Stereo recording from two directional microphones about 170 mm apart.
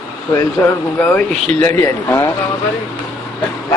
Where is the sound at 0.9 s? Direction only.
10° left (ahead or behind).